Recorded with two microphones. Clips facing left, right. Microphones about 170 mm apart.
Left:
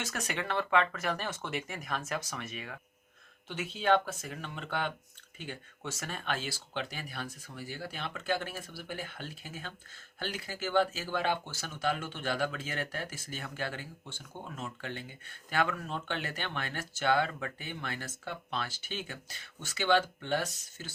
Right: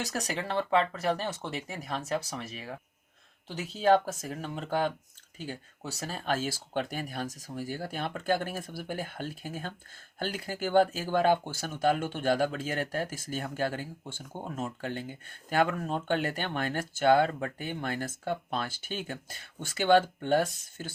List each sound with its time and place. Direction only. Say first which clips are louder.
0.0 s speech: right 3 dB; 35° right (ahead or behind); by 20.9 s 50° right (ahead or behind)